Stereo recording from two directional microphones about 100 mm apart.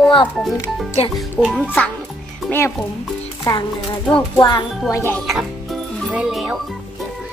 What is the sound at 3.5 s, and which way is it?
Speech, 45° left (ahead or behind).